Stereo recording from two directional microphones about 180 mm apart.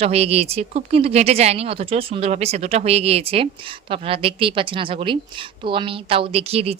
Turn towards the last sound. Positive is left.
turn(degrees=-35)  # may be behind; listen again after turning